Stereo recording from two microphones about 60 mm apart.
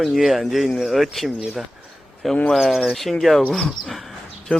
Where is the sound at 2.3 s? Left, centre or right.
Centre.